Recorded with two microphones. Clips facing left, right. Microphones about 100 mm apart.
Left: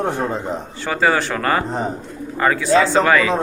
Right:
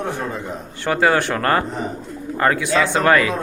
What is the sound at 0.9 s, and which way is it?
Speech, centre (ahead or behind).